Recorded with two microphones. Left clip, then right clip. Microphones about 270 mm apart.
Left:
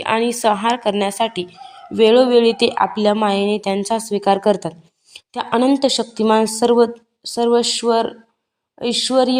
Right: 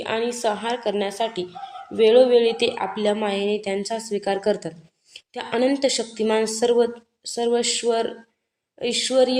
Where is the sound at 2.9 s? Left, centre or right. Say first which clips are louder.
Left 6 dB; left.